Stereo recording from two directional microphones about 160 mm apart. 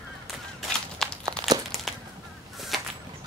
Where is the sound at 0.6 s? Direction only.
5° left (ahead or behind).